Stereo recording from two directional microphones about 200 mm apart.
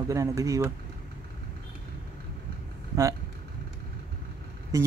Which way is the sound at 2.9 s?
15° right (ahead or behind).